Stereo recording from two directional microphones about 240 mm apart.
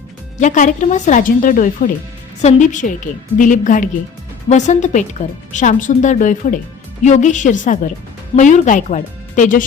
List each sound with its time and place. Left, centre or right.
0.3 s speech: left